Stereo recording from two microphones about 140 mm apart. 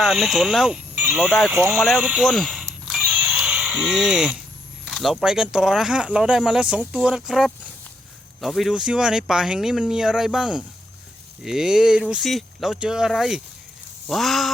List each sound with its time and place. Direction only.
0.0 s speech: centre (ahead or behind)
1.5 s speech: 15° right (ahead or behind)
1.8 s a sound: 5° right (ahead or behind)
4.9 s speech: centre (ahead or behind)